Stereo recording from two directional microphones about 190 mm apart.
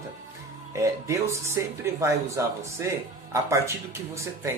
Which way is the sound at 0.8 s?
15° right (ahead or behind).